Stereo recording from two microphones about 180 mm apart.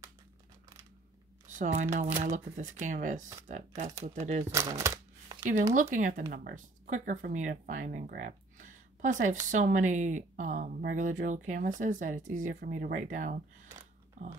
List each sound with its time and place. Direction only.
1.8 s speech: 40° right (ahead or behind)
4.5 s speech: 15° right (ahead or behind)
5.9 s speech: 45° right (ahead or behind)
14.2 s pig: 40° right (ahead or behind)